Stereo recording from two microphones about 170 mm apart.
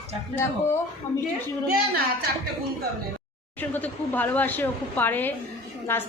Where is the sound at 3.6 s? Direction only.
10° left (ahead or behind).